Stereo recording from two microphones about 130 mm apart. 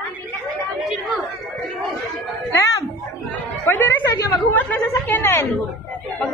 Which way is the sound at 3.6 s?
15° left (ahead or behind).